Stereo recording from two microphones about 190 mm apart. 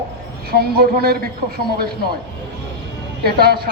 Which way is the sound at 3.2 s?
55° right (ahead or behind).